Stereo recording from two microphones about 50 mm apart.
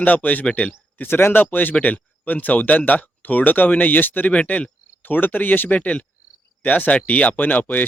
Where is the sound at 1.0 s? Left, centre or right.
Left.